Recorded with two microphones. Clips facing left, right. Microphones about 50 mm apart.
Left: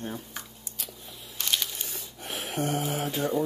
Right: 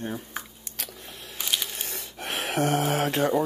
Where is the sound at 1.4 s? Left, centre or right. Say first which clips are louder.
Right 1 dB; centre.